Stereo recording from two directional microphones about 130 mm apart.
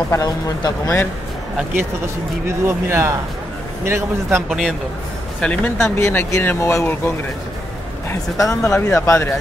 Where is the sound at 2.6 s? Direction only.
20° right (ahead or behind).